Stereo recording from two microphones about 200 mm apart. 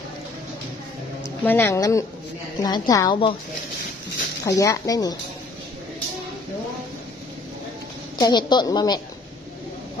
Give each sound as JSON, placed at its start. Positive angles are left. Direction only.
{"t": 1.4, "sound": "a woman's voice", "side_deg": 10}
{"t": 4.5, "sound": "a woman's voice", "side_deg": 15}
{"t": 8.2, "sound": "a woman's voice", "side_deg": 20}